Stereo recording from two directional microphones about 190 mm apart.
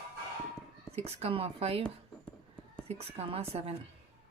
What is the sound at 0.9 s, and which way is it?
Speech, 30° right (ahead or behind).